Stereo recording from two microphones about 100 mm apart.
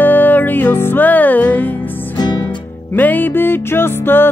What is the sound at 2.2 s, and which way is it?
Music, 45° left (ahead or behind).